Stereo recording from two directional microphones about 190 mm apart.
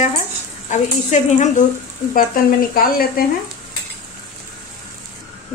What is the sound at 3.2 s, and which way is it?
Stir, 50° left (ahead or behind).